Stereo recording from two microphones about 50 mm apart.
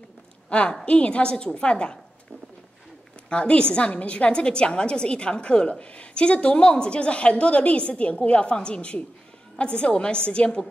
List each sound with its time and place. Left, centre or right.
0.5 s a woman's voice: left
3.3 s a woman's voice: left